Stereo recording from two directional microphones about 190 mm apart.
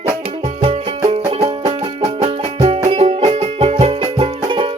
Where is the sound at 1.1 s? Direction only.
30° right (ahead or behind).